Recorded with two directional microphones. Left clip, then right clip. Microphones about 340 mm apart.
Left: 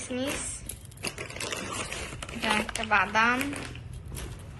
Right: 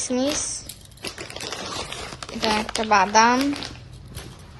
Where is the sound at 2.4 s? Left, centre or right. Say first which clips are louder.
Right 5 dB; centre.